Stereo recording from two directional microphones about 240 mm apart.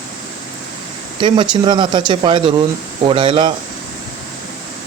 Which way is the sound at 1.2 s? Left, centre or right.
Centre.